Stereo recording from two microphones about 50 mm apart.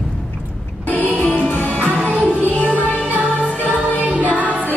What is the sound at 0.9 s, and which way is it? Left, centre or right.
Music, left.